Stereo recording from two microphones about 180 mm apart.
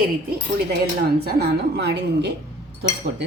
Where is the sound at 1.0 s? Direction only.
60° right (ahead or behind).